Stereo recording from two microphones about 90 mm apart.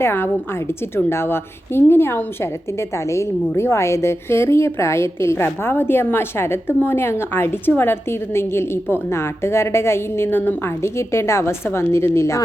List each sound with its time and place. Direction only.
0.0 s a woman's voice: 25° left (ahead or behind)